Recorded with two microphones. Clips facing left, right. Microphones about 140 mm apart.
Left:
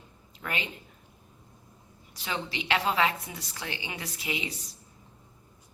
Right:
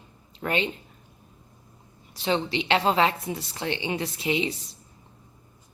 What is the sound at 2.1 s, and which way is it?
A woman's voice, 30° right (ahead or behind).